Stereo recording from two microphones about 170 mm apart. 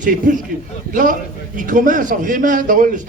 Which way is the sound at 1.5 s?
50° right (ahead or behind).